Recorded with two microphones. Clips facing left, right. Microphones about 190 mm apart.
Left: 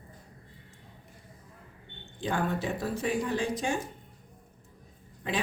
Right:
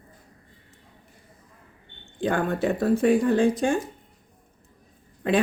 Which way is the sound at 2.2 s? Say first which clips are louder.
Right 6 dB; 55° right (ahead or behind).